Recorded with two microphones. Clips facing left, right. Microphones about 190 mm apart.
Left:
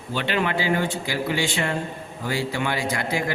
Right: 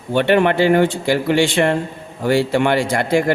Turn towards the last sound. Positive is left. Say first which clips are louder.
# right 9 dB
turn(degrees=-65)  # may be behind; listen again after turning